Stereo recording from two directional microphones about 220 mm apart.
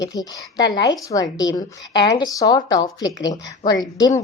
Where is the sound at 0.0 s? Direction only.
15° left (ahead or behind).